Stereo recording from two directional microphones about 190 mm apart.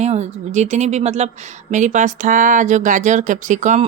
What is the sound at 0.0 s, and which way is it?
Speech, 35° right (ahead or behind).